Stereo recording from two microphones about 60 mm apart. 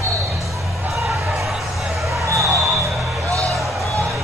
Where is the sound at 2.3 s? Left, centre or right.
Right.